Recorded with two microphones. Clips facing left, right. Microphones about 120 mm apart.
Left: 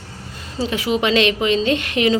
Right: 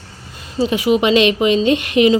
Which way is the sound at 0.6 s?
15° right (ahead or behind).